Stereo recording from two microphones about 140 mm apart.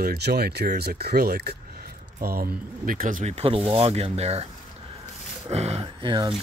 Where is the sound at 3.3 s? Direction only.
45° right (ahead or behind).